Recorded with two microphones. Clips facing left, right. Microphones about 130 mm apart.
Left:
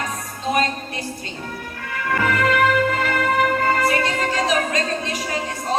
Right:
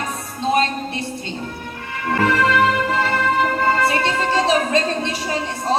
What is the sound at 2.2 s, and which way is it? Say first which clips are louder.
Music: right 2 dB; 30° right (ahead or behind).